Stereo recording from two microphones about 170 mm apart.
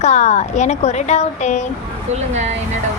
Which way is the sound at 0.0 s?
45° left (ahead or behind).